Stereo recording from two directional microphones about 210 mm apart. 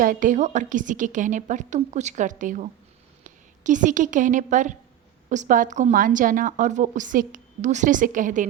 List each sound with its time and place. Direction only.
0.0 s a woman's voice: 40° right (ahead or behind)